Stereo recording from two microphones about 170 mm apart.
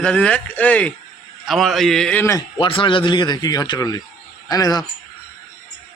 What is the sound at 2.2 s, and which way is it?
Speech, 20° left (ahead or behind).